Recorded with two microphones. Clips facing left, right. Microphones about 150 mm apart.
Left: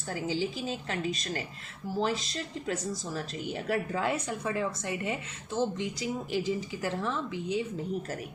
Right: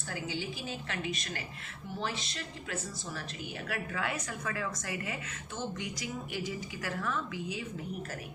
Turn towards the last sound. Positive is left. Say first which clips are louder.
# left 6 dB
turn(degrees=25)  # may be behind; listen again after turning